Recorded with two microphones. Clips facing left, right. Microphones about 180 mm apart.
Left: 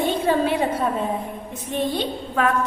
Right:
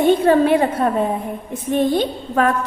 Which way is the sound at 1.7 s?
45° right (ahead or behind).